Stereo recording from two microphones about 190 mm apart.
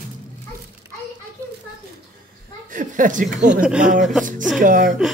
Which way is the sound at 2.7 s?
45° right (ahead or behind).